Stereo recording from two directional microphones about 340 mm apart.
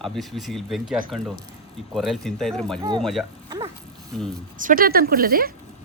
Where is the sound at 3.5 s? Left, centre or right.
Centre.